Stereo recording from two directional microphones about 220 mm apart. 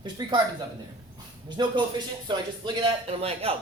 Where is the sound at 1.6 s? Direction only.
20° right (ahead or behind).